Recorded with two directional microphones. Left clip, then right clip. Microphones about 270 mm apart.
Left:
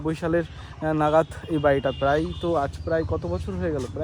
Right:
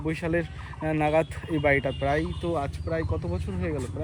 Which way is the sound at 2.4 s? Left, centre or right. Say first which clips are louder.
Left 5 dB; left.